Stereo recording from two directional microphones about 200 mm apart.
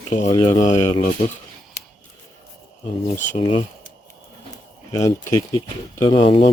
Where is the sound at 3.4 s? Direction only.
25° left (ahead or behind).